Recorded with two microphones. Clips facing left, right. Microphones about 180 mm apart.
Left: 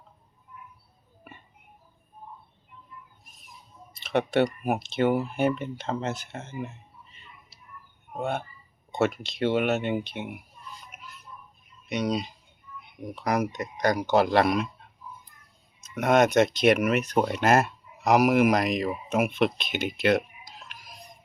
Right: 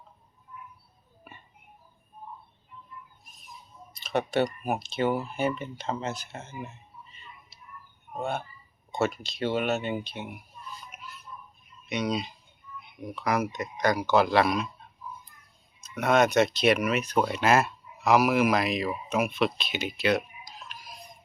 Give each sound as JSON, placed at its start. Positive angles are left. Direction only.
{"t": 4.0, "sound": "a sound", "side_deg": 60}
{"t": 4.4, "sound": "speech", "side_deg": 60}
{"t": 8.1, "sound": "speech", "side_deg": 55}
{"t": 11.9, "sound": "speech", "side_deg": 40}
{"t": 16.0, "sound": "speech", "side_deg": 45}
{"t": 20.6, "sound": "music", "side_deg": 60}